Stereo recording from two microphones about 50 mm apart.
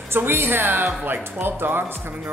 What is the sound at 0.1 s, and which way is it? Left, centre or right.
Speech, right.